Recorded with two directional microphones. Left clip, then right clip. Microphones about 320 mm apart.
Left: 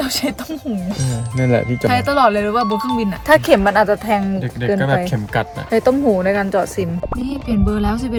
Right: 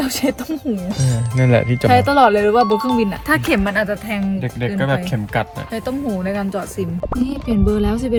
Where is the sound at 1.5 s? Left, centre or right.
Right.